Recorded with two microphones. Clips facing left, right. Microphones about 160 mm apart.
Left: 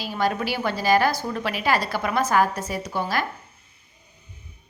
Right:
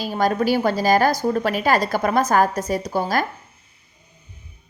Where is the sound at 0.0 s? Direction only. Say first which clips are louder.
Right 5 dB; 45° right (ahead or behind).